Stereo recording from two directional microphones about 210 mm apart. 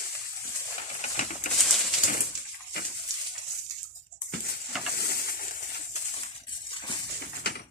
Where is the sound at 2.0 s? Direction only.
40° left (ahead or behind).